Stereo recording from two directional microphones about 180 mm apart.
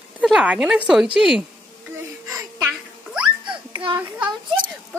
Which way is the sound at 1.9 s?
10° right (ahead or behind).